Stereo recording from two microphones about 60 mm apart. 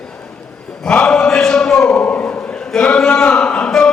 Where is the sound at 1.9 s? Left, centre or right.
Left.